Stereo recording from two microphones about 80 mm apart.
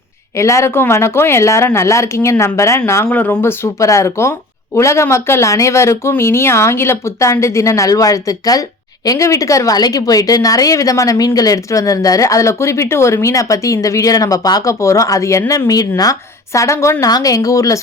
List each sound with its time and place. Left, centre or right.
0.3 s speech: left
3.1 s speech: left
9.7 s speech: left